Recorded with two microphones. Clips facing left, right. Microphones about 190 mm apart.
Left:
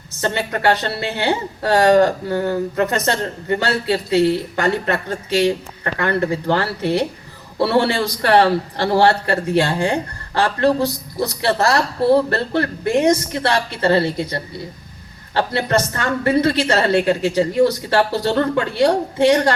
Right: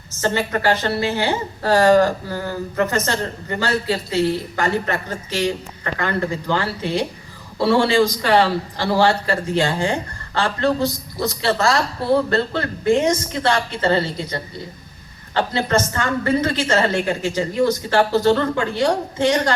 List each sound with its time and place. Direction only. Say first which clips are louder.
0.2 s a man's voice: even; 65° left (ahead or behind)
15.5 s a man's voice: even; 65° left (ahead or behind)